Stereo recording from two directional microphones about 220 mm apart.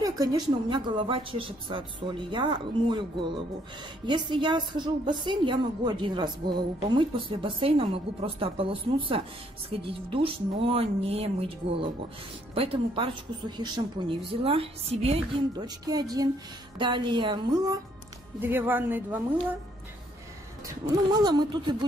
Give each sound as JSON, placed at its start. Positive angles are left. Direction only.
{"t": 0.0, "sound": "a woman's voice", "side_deg": -15}
{"t": 20.6, "sound": "a woman's voice", "side_deg": -20}